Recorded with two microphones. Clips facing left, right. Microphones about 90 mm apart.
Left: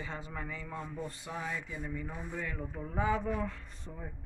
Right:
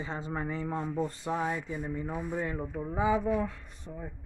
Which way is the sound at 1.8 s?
25° right (ahead or behind).